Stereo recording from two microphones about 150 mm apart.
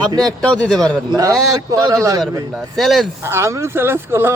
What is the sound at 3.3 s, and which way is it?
Speech, 15° right (ahead or behind).